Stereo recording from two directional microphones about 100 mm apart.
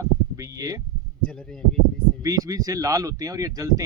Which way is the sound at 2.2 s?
35° right (ahead or behind).